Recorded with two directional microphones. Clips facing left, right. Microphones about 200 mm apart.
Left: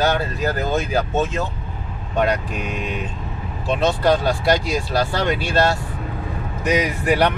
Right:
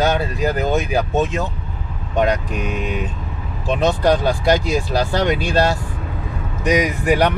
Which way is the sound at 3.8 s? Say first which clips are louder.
Right 1 dB; 15° right (ahead or behind).